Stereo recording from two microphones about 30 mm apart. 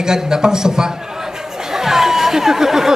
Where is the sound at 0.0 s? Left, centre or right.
Right.